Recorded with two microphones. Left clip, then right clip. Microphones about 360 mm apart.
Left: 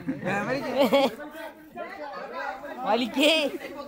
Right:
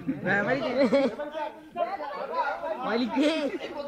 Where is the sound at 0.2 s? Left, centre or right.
Centre.